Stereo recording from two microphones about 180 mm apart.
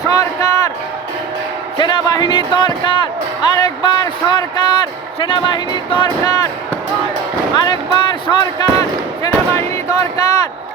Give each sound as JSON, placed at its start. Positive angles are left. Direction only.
{"t": 0.1, "sound": "a sound", "side_deg": 20}
{"t": 1.8, "sound": "a man's voice", "side_deg": 25}
{"t": 7.5, "sound": "a man's voice", "side_deg": 25}